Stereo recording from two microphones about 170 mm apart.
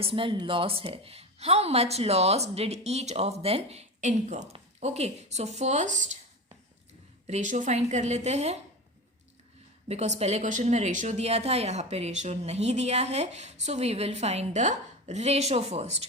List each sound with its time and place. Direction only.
0.0 s a woman's voice: 30° right (ahead or behind)
7.3 s a woman's voice: 45° right (ahead or behind)
9.9 s a woman's voice: 40° right (ahead or behind)